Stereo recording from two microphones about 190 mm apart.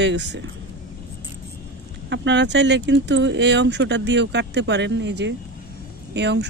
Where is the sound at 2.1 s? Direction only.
70° right (ahead or behind).